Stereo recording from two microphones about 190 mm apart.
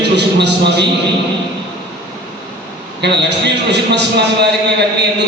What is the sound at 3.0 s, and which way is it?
A man's voice, 65° right (ahead or behind).